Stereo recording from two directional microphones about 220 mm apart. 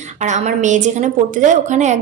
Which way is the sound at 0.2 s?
35° right (ahead or behind).